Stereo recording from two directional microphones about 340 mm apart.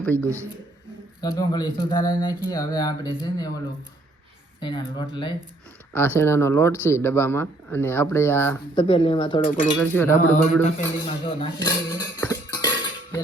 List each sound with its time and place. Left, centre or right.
0.0 s speech: centre
4.6 s speech: centre
9.8 s speech: centre